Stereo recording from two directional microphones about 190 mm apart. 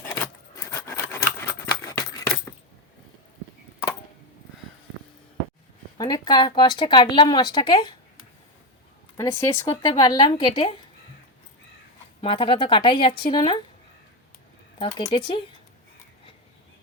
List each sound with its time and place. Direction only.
0.1 s keys jangling: 15° left (ahead or behind)
6.0 s speech: 20° left (ahead or behind)
9.1 s speech: 15° left (ahead or behind)
12.2 s speech: 30° left (ahead or behind)
14.8 s speech: 30° left (ahead or behind)